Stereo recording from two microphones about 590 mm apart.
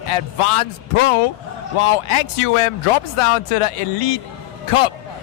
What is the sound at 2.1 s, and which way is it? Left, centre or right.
Speech, left.